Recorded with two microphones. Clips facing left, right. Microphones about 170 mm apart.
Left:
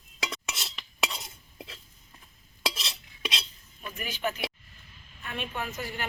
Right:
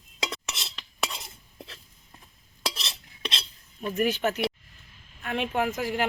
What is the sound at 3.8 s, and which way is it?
Speech, 40° right (ahead or behind).